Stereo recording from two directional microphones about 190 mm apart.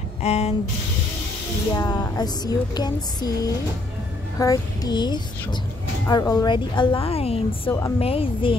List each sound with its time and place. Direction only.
0.2 s speech: 35° left (ahead or behind)
1.8 s speech: 20° left (ahead or behind)
4.4 s speech: 20° left (ahead or behind)